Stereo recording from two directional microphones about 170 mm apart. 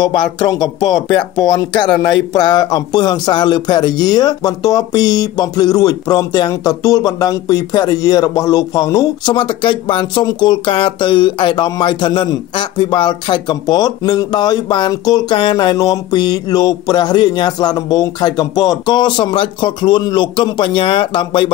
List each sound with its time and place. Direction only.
0.0 s speech: 25° left (ahead or behind)